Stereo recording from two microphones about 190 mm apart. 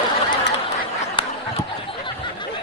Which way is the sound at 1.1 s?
25° left (ahead or behind).